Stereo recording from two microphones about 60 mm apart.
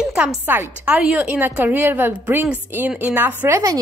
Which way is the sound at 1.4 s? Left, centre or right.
Right.